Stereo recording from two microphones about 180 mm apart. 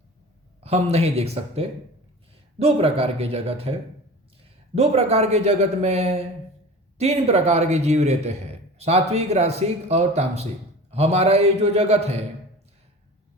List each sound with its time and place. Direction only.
0.6 s a man's voice: 35° right (ahead or behind)